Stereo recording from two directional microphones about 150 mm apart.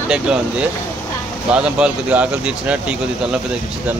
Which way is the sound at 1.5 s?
10° right (ahead or behind).